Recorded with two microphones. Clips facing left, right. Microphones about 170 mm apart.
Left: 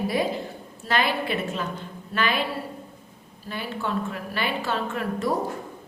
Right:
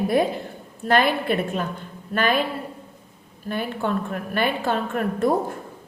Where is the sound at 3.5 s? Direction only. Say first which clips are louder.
Right 4 dB; 50° right (ahead or behind).